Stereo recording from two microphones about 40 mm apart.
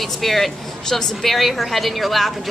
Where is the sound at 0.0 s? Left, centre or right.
Centre.